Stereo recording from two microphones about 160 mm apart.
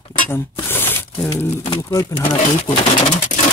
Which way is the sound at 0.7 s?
15° left (ahead or behind).